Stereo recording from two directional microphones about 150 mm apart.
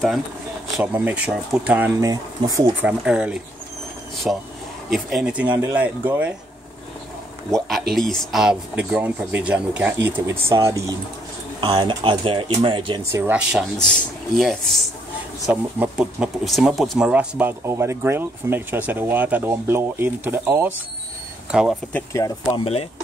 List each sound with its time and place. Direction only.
0.7 s speech: 10° right (ahead or behind)
2.0 s speech: 25° right (ahead or behind)
2.8 s speech: 10° right (ahead or behind)
7.5 s speech: centre (ahead or behind); by 13.0 s 35° right (ahead or behind)
13.1 s speech: 10° right (ahead or behind)
13.7 s speech: 5° left (ahead or behind)
22.1 s speech: 20° left (ahead or behind)
22.6 s speech: 40° left (ahead or behind)